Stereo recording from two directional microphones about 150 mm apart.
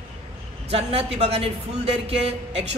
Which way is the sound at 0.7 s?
40° right (ahead or behind).